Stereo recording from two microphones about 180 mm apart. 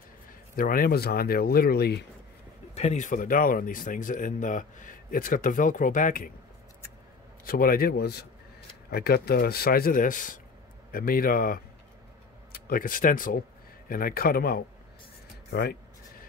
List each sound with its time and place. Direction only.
0.6 s a man's voice: 50° left (ahead or behind)
2.7 s speech: 40° left (ahead or behind)
7.4 s a man's voice: 55° left (ahead or behind)